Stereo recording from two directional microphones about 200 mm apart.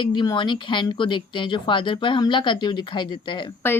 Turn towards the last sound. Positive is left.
turn(degrees=10)  # may be behind; listen again after turning